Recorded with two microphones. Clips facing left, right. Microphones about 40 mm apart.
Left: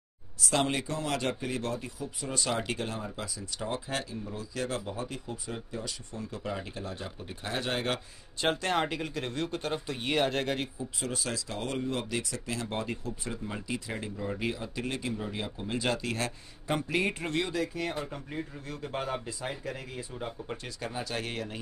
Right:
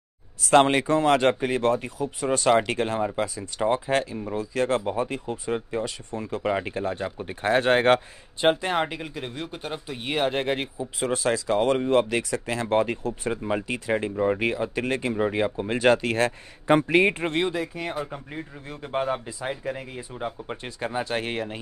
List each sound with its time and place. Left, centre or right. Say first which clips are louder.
0.4 s speech: right 11 dB; right
8.4 s speech: right 6 dB; right
10.8 s speech: right 9 dB; right